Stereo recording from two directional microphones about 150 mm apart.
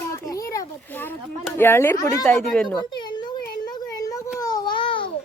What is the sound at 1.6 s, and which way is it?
Speech, 15° left (ahead or behind).